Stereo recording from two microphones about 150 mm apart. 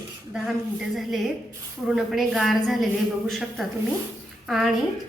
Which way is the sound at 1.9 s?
5° right (ahead or behind).